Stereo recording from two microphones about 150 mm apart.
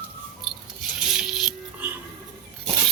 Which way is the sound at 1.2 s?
5° right (ahead or behind).